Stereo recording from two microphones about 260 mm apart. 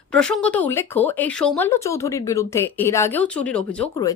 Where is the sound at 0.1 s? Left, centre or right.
Centre.